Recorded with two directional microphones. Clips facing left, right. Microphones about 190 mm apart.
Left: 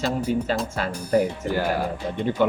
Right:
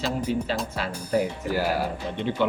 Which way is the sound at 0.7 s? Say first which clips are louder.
Left 4 dB; 45° left (ahead or behind).